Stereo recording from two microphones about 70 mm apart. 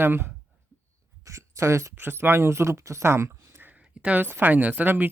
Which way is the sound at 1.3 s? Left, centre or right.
Right.